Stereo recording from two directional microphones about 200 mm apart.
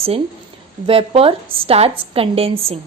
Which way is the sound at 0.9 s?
30° right (ahead or behind).